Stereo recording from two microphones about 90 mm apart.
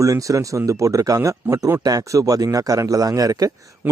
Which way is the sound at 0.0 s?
40° right (ahead or behind).